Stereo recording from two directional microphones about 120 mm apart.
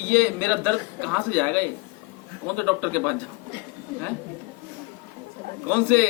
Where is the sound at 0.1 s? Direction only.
15° left (ahead or behind).